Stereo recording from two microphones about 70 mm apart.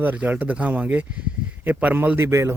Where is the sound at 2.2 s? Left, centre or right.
Right.